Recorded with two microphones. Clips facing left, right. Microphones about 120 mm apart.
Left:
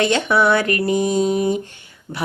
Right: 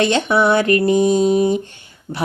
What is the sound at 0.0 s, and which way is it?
Mantra, 25° right (ahead or behind).